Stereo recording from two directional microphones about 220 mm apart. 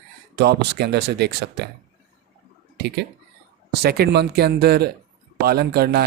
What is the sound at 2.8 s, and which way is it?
Speech, 50° right (ahead or behind).